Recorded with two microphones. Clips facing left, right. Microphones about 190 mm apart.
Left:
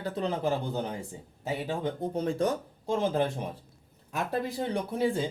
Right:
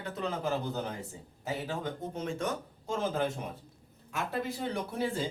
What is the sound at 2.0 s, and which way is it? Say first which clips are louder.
Speech: left 6 dB; 35° left (ahead or behind).